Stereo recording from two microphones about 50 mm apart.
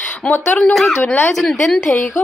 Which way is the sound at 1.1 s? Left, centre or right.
Left.